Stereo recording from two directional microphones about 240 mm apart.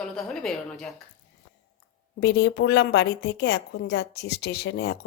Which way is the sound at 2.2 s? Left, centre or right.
Left.